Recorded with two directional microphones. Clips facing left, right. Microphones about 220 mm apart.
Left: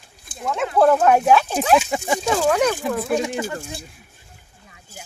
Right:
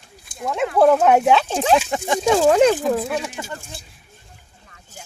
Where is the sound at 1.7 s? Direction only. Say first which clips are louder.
Left 1 dB; 5° left (ahead or behind).